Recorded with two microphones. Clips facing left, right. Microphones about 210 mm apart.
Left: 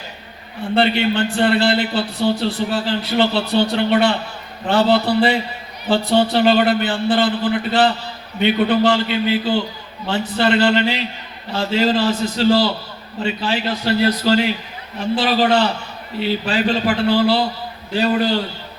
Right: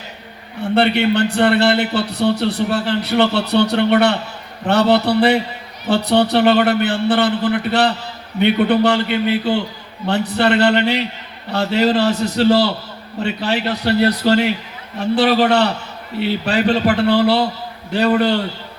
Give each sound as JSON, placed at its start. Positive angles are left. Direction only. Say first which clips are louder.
{"t": 0.8, "sound": "a man's voice", "louder": "right 2 dB", "side_deg": -65}